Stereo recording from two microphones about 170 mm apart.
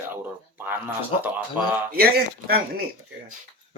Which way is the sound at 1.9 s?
60° right (ahead or behind).